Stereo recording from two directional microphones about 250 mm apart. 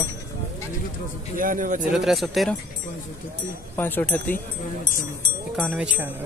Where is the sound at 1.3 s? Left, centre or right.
Right.